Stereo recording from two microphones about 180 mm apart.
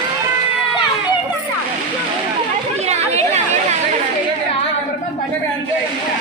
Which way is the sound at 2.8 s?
35° right (ahead or behind).